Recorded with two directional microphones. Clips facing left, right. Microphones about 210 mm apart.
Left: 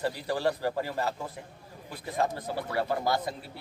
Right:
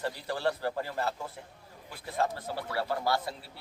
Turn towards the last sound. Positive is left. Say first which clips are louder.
# left 2 dB
turn(degrees=15)  # may be behind; listen again after turning